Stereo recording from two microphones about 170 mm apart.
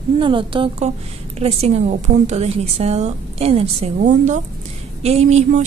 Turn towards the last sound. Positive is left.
turn(degrees=-40)  # may be behind; listen again after turning